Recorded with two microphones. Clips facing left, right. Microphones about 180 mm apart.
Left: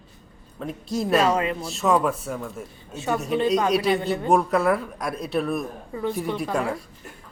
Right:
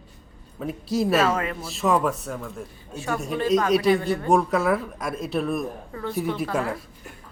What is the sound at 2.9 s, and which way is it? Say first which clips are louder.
A woman's voice: left 3 dB; 20° left (ahead or behind).